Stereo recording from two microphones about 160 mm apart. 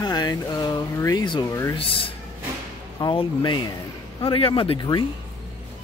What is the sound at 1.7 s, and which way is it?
Speech, 35° left (ahead or behind).